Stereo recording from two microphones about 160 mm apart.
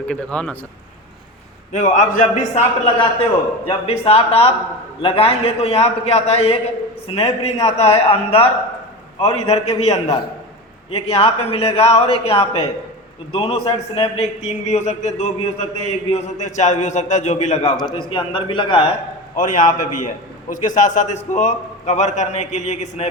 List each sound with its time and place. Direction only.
0.1 s speech: 5° left (ahead or behind)
1.7 s a man's voice: 50° left (ahead or behind)
17.7 s a man's voice: 30° left (ahead or behind)
19.4 s a man's voice: 55° left (ahead or behind)